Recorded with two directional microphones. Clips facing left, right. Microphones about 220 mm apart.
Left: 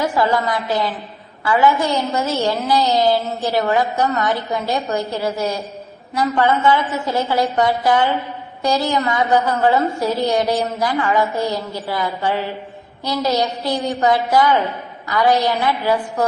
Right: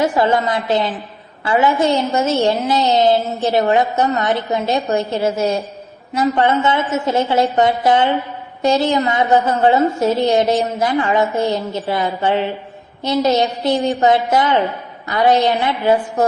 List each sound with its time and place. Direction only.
0.0 s a woman's voice: 25° right (ahead or behind)